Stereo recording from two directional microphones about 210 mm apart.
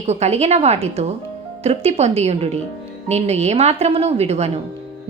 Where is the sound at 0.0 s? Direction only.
30° right (ahead or behind).